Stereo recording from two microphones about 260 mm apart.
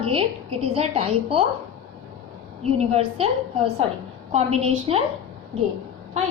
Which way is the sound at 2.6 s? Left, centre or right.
Right.